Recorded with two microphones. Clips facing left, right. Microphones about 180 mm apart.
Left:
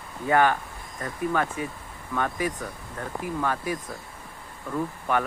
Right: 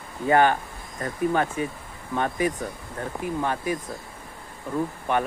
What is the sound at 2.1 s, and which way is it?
Speech, 25° right (ahead or behind).